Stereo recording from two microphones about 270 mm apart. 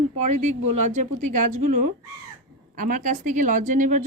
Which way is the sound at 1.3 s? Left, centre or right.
Right.